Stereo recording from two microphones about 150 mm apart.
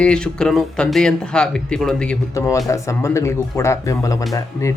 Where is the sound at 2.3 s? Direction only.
20° left (ahead or behind).